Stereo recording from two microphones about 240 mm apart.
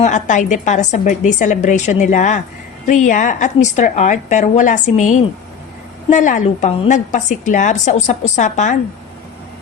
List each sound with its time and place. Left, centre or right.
0.0 s a woman's voice: left